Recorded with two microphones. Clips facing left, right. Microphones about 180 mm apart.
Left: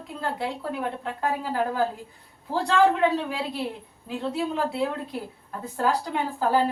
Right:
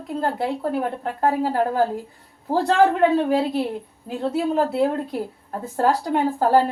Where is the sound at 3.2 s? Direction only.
45° right (ahead or behind).